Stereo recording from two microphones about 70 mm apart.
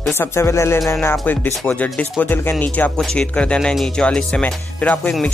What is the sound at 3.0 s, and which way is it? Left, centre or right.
Speech, centre.